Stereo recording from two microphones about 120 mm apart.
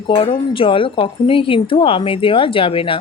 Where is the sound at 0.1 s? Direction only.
50° left (ahead or behind).